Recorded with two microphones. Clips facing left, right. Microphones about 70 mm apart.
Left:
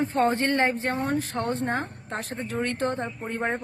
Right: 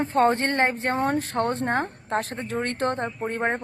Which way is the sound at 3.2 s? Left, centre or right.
Right.